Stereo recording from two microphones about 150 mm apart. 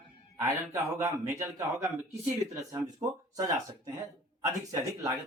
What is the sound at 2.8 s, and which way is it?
Speech, 25° right (ahead or behind).